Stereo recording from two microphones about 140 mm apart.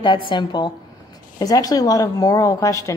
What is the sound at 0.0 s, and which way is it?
A woman's voice, 35° left (ahead or behind).